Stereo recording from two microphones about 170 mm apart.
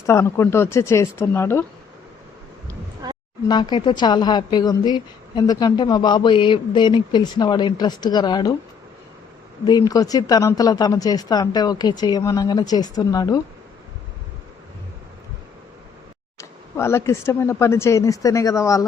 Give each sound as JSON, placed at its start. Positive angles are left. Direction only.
{"t": 0.0, "sound": "speech", "side_deg": 15}
{"t": 3.0, "sound": "a sound", "side_deg": -25}
{"t": 3.5, "sound": "a woman's voice", "side_deg": 25}
{"t": 9.6, "sound": "a woman's voice", "side_deg": 20}
{"t": 16.4, "sound": "speech", "side_deg": 15}